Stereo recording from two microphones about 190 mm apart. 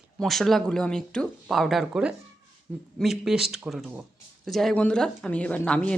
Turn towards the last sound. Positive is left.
turn(degrees=5)  # may be behind; listen again after turning